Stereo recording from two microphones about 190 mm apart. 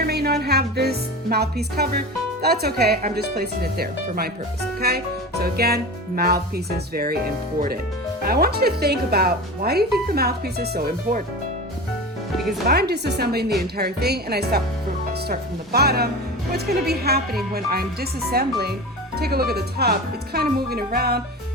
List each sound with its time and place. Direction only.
0.0 s speech: 55° right (ahead or behind)
12.4 s speech: centre (ahead or behind)
12.6 s speech: 60° right (ahead or behind)